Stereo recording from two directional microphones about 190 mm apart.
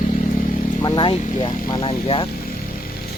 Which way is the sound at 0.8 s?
25° left (ahead or behind).